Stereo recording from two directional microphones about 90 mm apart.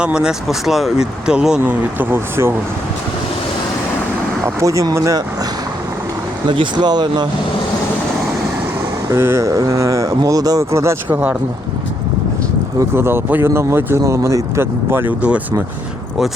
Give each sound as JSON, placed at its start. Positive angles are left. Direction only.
{"t": 0.0, "sound": "speech", "side_deg": -10}
{"t": 1.6, "sound": "speech", "side_deg": -20}
{"t": 4.6, "sound": "a sound", "side_deg": -35}
{"t": 6.5, "sound": "speech", "side_deg": -60}
{"t": 9.1, "sound": "a sound", "side_deg": -30}
{"t": 12.9, "sound": "speech", "side_deg": -25}